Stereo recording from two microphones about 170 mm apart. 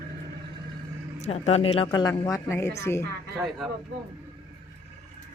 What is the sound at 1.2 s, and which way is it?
Speech, 40° left (ahead or behind).